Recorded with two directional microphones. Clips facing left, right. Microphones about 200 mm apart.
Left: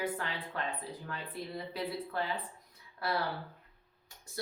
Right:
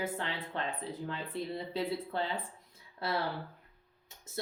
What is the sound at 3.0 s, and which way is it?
Speech, 25° right (ahead or behind).